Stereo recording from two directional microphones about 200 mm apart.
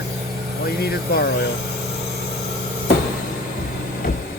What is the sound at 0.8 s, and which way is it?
Speech, 50° left (ahead or behind).